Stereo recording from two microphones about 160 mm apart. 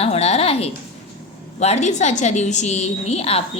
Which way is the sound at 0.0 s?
40° left (ahead or behind).